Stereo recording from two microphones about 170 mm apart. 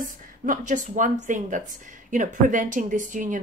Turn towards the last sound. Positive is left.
turn(degrees=-50)  # may be behind; listen again after turning